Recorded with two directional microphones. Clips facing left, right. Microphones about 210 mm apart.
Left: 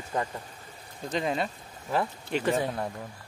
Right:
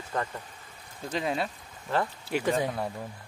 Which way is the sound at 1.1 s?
5° right (ahead or behind).